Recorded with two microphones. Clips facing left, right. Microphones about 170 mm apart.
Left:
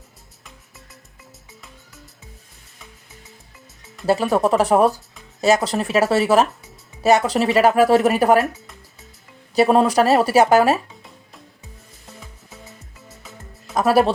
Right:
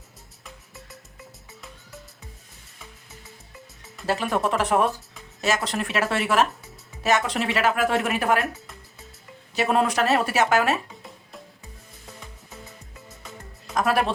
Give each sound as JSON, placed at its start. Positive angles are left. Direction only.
{"t": 4.0, "sound": "a woman's voice", "side_deg": 35}
{"t": 9.6, "sound": "a woman's voice", "side_deg": 35}
{"t": 13.7, "sound": "a woman's voice", "side_deg": 35}